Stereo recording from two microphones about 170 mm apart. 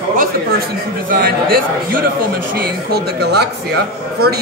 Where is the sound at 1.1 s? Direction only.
60° right (ahead or behind).